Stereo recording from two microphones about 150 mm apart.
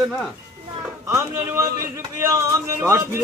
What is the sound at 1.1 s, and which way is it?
Speech, 20° right (ahead or behind).